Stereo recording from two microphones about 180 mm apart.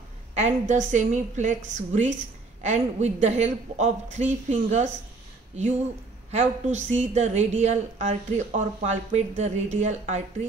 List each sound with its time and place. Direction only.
0.3 s speech: 40° right (ahead or behind)
6.3 s speech: 40° right (ahead or behind)